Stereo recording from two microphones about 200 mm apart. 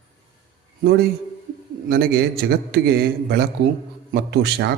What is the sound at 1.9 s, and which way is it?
A man's voice, 50° right (ahead or behind).